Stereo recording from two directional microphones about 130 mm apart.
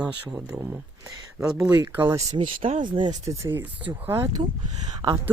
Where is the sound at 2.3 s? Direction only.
40° right (ahead or behind).